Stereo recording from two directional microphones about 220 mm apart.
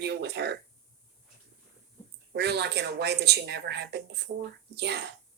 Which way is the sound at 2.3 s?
50° right (ahead or behind).